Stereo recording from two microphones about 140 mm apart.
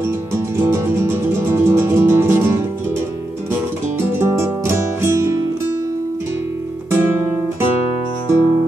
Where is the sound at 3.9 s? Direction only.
20° right (ahead or behind).